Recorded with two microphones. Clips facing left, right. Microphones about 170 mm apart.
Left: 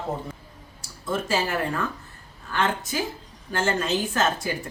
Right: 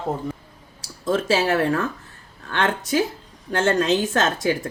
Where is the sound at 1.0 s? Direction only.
90° right.